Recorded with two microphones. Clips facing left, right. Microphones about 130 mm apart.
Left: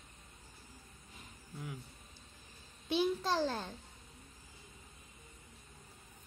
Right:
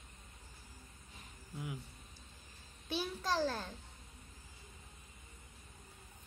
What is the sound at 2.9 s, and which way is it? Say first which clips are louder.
Speech: left 4 dB; 15° left (ahead or behind).